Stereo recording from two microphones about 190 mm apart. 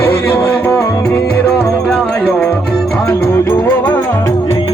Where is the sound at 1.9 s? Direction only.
5° left (ahead or behind).